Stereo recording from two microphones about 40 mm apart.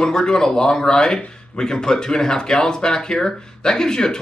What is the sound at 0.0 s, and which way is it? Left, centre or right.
Speech, centre.